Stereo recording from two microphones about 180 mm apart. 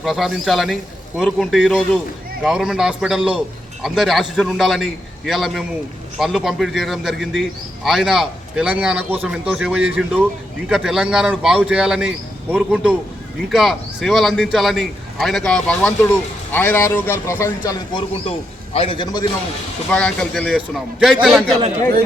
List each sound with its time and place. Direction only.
0.0 s a man's voice: centre (ahead or behind); by 18.0 s 15° left (ahead or behind)
18.3 s a man's voice: 30° left (ahead or behind)
19.9 s speech: 5° left (ahead or behind)